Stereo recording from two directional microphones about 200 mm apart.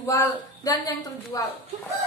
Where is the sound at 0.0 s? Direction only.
15° left (ahead or behind).